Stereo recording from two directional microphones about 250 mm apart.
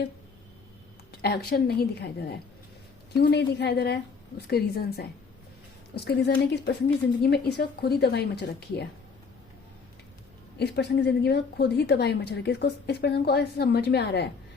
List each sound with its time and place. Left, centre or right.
1.1 s a woman's voice: left
3.1 s a woman's voice: left
10.6 s a woman's voice: left